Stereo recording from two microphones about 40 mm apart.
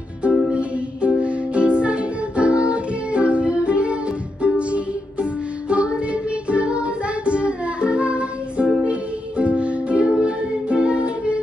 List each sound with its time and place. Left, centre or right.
0.5 s music: right